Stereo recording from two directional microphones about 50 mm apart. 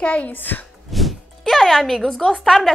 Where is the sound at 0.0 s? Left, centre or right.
Left.